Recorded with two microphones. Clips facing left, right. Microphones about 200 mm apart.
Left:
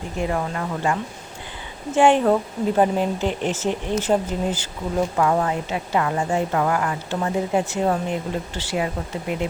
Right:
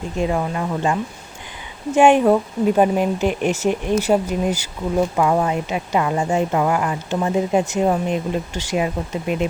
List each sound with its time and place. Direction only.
0.2 s speech: 20° right (ahead or behind)